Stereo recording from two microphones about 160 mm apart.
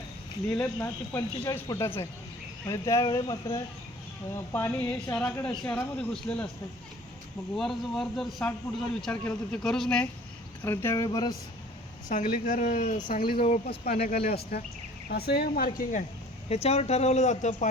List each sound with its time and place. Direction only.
0.5 s speech: 15° left (ahead or behind)
7.5 s a man's voice: centre (ahead or behind)
10.6 s speech: 15° left (ahead or behind)
12.0 s speech: 60° left (ahead or behind)
14.2 s speech: 40° left (ahead or behind)
15.1 s speech: 85° left
16.5 s speech: 40° left (ahead or behind)